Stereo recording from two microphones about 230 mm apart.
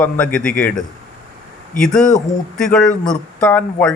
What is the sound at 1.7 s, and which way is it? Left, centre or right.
Speech, centre.